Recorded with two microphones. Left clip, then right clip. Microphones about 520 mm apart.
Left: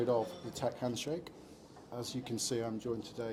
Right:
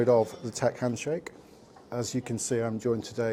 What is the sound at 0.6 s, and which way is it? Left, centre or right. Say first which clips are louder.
Speech: right 8 dB; right.